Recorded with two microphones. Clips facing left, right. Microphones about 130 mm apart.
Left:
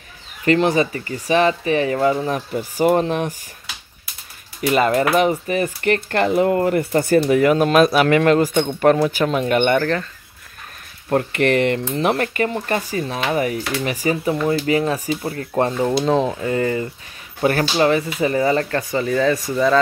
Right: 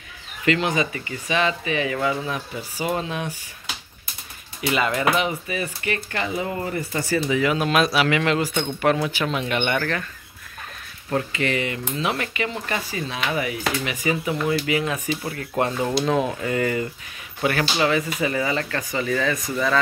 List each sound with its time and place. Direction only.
0.5 s speech: 40° left (ahead or behind)
4.6 s speech: 45° left (ahead or behind)
11.3 s speech: 60° left (ahead or behind); by 19.4 s 30° left (ahead or behind)